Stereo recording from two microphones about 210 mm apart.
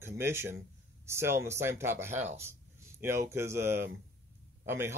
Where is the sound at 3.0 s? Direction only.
10° right (ahead or behind).